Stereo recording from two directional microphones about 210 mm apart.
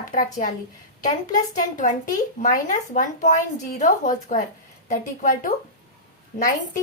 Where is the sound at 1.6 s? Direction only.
40° left (ahead or behind).